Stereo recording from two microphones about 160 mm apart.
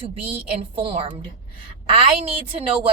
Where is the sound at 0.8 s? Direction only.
40° right (ahead or behind).